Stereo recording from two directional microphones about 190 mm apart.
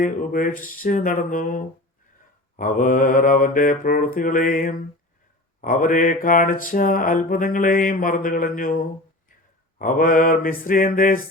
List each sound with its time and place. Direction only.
0.0 s mantra: 45° left (ahead or behind)